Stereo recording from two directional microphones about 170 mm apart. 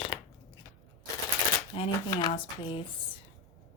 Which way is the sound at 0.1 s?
30° left (ahead or behind).